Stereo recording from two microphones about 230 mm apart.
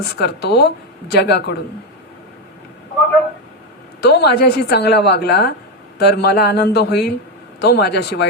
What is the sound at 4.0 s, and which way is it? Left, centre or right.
A woman's voice, left.